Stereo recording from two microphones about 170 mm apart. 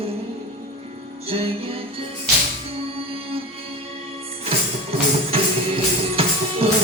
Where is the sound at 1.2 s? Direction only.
35° right (ahead or behind).